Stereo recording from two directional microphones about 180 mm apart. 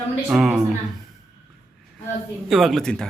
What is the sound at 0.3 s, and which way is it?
Speech, centre (ahead or behind).